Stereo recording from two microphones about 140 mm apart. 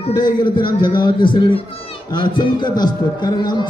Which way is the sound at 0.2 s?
35° left (ahead or behind).